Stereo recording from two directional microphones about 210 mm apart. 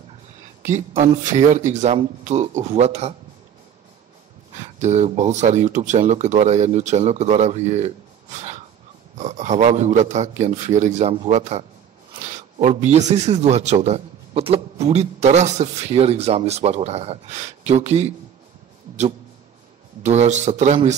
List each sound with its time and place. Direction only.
0.7 s a man's voice: 35° right (ahead or behind)
4.6 s a man's voice: 35° right (ahead or behind)
20.0 s a man's voice: 35° right (ahead or behind)